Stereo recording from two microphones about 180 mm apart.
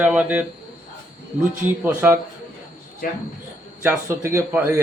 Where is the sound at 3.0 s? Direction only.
50° left (ahead or behind).